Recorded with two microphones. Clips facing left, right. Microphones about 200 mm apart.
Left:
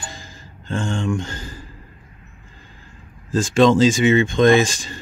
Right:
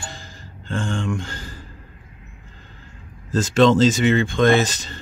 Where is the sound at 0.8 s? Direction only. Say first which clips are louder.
Left 2 dB; 15° left (ahead or behind).